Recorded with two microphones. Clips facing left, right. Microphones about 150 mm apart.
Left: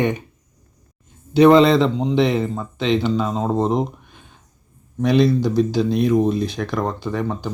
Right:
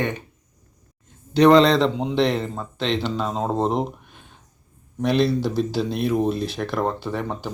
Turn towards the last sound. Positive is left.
turn(degrees=0)  # may be behind; listen again after turning